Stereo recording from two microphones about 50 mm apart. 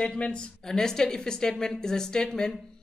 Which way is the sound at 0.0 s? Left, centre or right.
Left.